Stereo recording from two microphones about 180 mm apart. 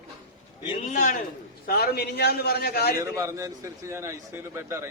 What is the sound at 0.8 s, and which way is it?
Speech, 45° left (ahead or behind).